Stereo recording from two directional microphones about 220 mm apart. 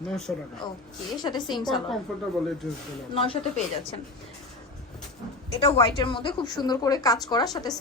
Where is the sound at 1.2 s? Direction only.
20° left (ahead or behind).